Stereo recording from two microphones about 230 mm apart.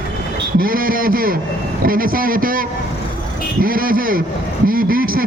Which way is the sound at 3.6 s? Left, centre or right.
Right.